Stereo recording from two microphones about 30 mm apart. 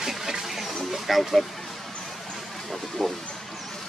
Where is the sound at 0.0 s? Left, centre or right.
Centre.